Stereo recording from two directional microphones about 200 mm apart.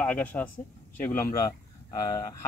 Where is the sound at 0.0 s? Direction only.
5° left (ahead or behind).